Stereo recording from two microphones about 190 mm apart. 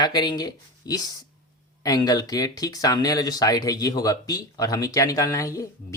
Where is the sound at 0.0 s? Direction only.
20° left (ahead or behind).